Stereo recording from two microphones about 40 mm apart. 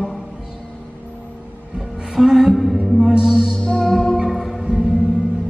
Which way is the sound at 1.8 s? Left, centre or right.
Centre.